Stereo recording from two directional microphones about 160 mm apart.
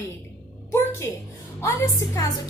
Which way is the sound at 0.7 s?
15° left (ahead or behind).